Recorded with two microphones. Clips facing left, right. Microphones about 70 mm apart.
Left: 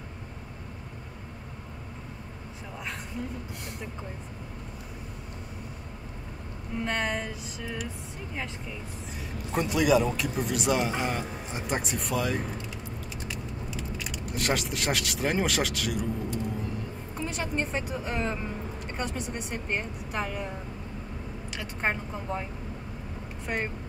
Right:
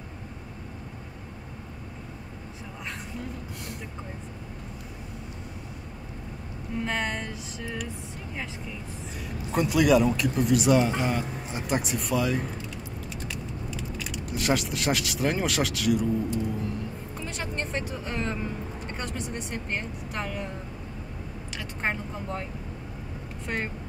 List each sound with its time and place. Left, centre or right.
6.8 s speech: centre
9.5 s speech: centre
14.3 s speech: centre
17.2 s speech: centre
21.8 s speech: centre